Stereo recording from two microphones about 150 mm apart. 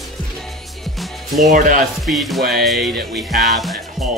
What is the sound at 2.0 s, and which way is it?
Music, centre (ahead or behind).